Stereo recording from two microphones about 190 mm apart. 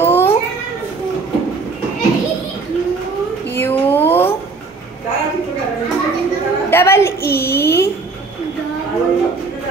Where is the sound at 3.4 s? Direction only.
10° left (ahead or behind).